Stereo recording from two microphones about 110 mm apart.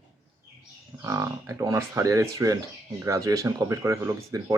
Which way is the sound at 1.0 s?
25° right (ahead or behind).